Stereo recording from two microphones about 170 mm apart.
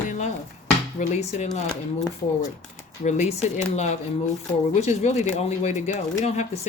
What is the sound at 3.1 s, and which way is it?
Speech, 45° left (ahead or behind).